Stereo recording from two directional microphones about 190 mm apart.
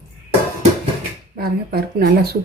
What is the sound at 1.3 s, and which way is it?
Speech, 55° right (ahead or behind).